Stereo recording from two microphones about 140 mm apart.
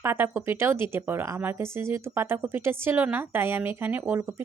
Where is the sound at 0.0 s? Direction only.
15° right (ahead or behind).